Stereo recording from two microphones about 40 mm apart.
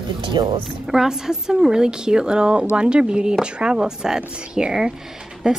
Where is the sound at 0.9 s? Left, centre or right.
Centre.